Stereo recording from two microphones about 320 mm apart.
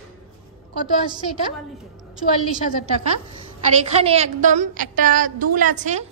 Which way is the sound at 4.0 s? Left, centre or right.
Centre.